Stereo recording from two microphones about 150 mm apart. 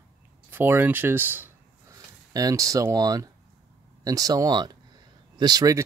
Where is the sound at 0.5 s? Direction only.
15° right (ahead or behind).